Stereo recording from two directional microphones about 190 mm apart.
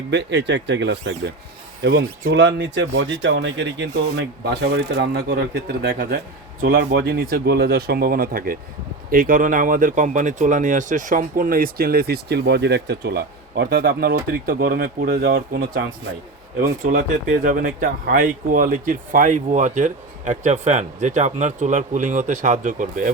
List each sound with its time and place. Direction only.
0.1 s speech: 65° right (ahead or behind)
17.4 s speech: 45° right (ahead or behind)